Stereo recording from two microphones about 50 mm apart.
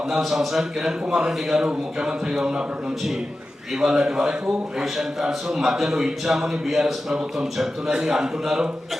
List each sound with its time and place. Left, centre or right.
0.3 s a man's voice: centre
3.8 s a man's voice: centre